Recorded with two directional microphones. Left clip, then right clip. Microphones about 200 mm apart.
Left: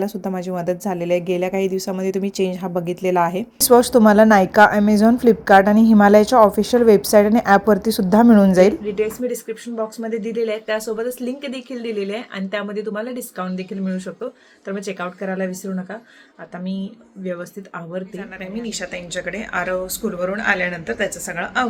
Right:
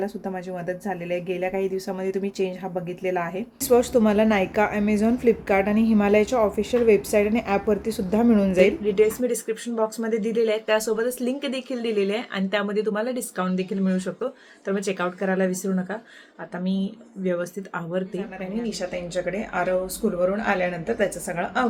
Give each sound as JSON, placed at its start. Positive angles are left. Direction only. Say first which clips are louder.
{"t": 0.0, "sound": "a woman's voice", "louder": "left 5 dB", "side_deg": 25}
{"t": 8.8, "sound": "speech", "louder": "right 1 dB", "side_deg": -10}